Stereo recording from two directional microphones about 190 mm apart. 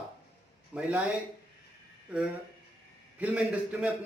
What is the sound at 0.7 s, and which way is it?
Speech, 5° right (ahead or behind).